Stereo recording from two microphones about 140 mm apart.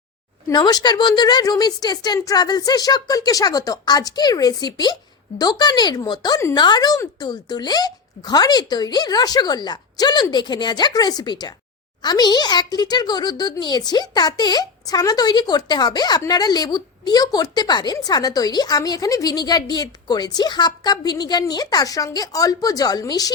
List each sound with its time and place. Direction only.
0.4 s speech: 30° left (ahead or behind)